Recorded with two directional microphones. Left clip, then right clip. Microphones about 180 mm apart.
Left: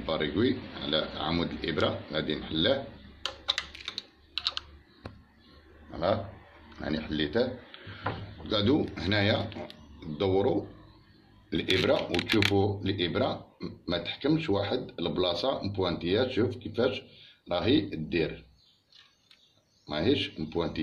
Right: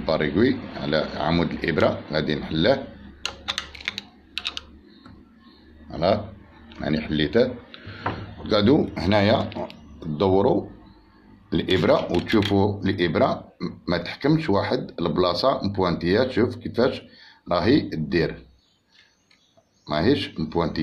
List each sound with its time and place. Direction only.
0.0 s speech: 25° right (ahead or behind)
5.9 s a sound: 25° right (ahead or behind)
6.8 s speech: 25° right (ahead or behind)
19.9 s speech: 25° right (ahead or behind)